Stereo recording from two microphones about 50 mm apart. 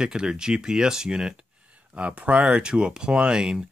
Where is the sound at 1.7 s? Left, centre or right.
Right.